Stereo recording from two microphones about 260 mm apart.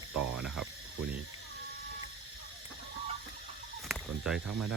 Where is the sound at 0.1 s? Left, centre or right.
Right.